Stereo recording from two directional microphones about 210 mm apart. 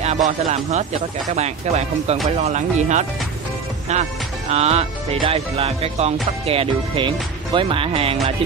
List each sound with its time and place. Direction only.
0.0 s speech: 30° right (ahead or behind)